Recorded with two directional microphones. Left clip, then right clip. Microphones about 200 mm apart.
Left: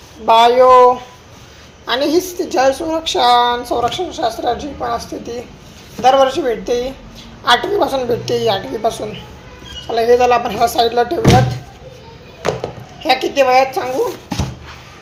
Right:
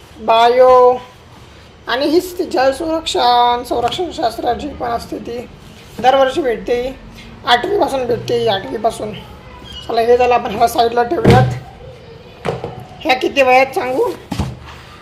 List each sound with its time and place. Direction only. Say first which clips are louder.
0.3 s a woman's voice: left 1 dB; centre (ahead or behind)
13.0 s a woman's voice: even; 15° right (ahead or behind)